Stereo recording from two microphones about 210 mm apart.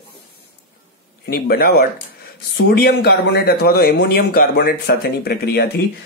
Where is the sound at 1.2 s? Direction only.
50° left (ahead or behind).